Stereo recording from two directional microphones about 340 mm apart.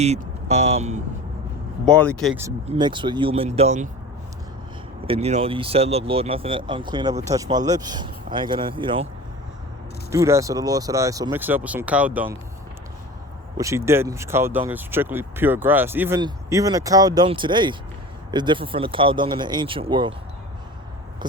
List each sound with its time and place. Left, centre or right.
0.0 s speech: centre
1.8 s speech: centre
2.6 s speech: centre
5.0 s speech: centre
10.1 s speech: centre
13.6 s speech: centre